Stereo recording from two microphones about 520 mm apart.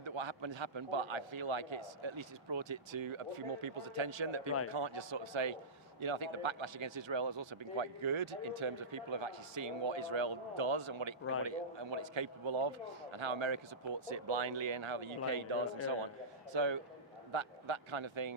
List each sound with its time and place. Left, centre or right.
0.0 s speech: right